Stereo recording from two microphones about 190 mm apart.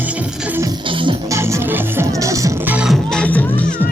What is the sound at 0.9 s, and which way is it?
Music, 25° right (ahead or behind).